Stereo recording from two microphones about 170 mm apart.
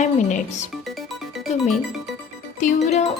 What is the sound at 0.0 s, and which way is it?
Music, 45° left (ahead or behind).